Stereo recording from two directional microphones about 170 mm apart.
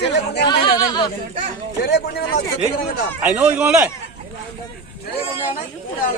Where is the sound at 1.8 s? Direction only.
70° left (ahead or behind).